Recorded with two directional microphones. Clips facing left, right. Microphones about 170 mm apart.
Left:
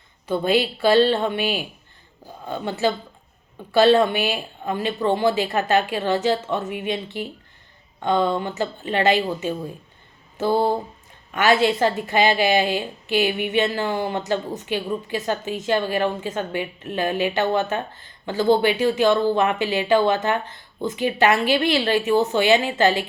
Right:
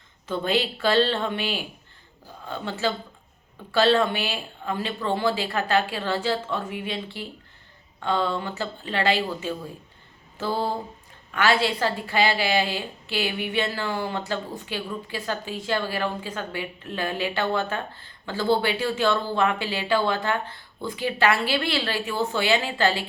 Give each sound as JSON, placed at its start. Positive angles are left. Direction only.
{"t": 0.3, "sound": "a woman's voice", "side_deg": 10}
{"t": 10.3, "sound": "a sound", "side_deg": 15}
{"t": 11.3, "sound": "a woman's voice", "side_deg": 20}